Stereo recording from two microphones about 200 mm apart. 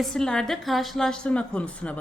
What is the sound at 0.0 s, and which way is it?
A woman's voice, 5° left (ahead or behind).